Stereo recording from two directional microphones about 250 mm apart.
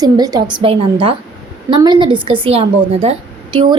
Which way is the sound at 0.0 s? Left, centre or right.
Centre.